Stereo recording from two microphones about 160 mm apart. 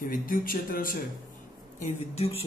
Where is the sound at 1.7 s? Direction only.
45° left (ahead or behind).